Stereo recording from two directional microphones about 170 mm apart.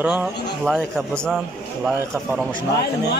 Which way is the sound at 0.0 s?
10° right (ahead or behind).